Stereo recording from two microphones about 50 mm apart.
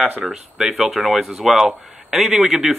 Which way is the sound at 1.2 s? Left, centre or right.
Centre.